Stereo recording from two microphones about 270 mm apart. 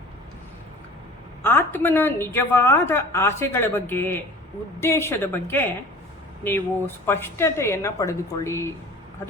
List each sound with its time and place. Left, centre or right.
1.5 s a woman's voice: centre